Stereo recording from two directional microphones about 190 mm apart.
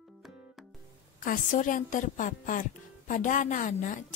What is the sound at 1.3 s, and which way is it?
Speech, 45° left (ahead or behind).